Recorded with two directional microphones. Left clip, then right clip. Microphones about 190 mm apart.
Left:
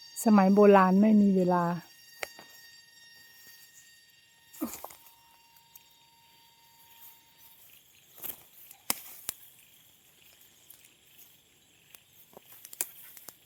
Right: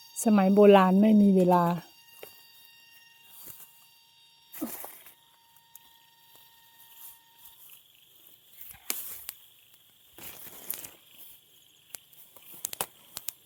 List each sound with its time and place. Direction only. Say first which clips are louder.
0.2 s a woman's voice: right 1 dB; centre (ahead or behind)
1.1 s speech: right 2 dB; 20° right (ahead or behind)
1.4 s speech: right 4 dB; 10° right (ahead or behind)